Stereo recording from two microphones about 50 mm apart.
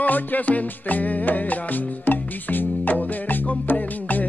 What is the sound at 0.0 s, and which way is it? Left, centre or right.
Music, left.